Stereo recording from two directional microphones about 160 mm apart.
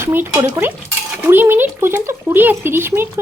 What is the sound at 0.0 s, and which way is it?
Dishes, 10° right (ahead or behind).